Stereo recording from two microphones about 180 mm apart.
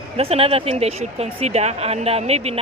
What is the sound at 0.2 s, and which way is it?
A woman's voice, 35° right (ahead or behind).